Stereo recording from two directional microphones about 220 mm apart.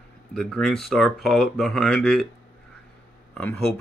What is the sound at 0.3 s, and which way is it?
Speech, centre (ahead or behind).